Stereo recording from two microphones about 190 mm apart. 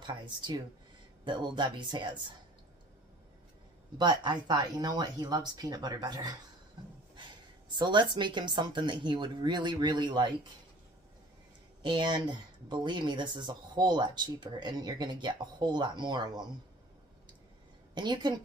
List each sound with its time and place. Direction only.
0.0 s speech: 25° right (ahead or behind)
4.0 s speech: 25° right (ahead or behind)
7.7 s speech: 25° right (ahead or behind)
11.8 s speech: 25° right (ahead or behind)
17.9 s speech: 25° right (ahead or behind)